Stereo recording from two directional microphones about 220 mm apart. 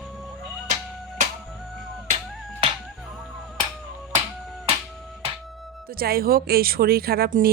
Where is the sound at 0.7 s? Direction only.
35° right (ahead or behind).